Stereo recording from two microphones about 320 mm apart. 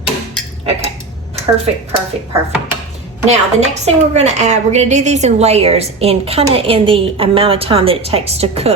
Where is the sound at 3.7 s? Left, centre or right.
Right.